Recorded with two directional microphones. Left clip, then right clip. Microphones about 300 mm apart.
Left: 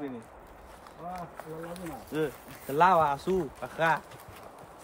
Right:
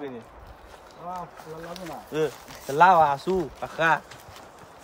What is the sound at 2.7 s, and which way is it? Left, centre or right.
Speech, right.